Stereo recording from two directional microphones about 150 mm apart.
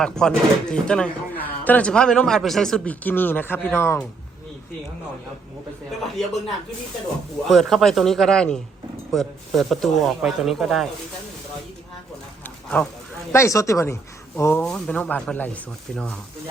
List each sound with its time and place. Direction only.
0.0 s speech: 5° left (ahead or behind)
6.0 s speech: centre (ahead or behind)
7.4 s speech: centre (ahead or behind)
13.3 s speech: 20° left (ahead or behind)
14.6 s speech: 5° left (ahead or behind)